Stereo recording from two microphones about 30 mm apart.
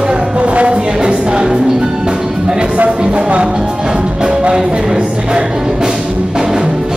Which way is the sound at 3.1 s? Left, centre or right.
Right.